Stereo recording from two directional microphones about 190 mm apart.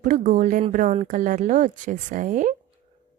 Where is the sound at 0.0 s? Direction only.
40° right (ahead or behind).